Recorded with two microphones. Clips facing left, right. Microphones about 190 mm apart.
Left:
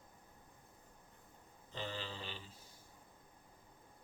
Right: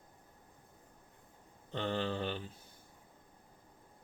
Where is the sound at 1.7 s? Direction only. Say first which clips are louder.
Right 9 dB; 60° right (ahead or behind).